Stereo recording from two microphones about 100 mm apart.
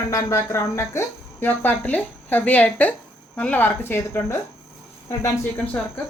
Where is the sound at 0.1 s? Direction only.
30° left (ahead or behind).